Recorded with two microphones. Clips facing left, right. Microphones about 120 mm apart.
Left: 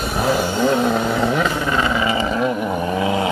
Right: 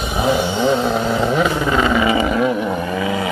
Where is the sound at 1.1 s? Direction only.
10° right (ahead or behind).